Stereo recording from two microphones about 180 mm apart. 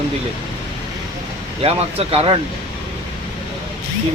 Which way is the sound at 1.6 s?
30° right (ahead or behind).